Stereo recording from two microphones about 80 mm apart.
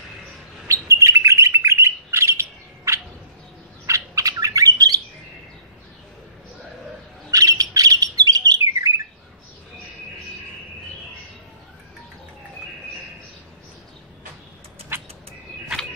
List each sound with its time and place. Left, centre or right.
0.7 s bird: right
7.2 s bird: right